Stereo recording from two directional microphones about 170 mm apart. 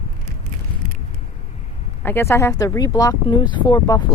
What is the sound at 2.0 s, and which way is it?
Speech, 15° left (ahead or behind).